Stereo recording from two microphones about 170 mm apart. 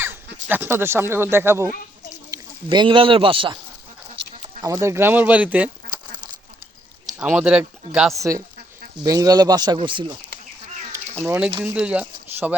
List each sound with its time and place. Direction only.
0.4 s speech: 10° right (ahead or behind)
2.3 s speech: 25° right (ahead or behind)
4.6 s speech: 20° right (ahead or behind)
7.2 s speech: 5° right (ahead or behind)
9.0 s speech: 20° right (ahead or behind)
10.9 s cat: 15° right (ahead or behind)
11.6 s speech: 5° right (ahead or behind)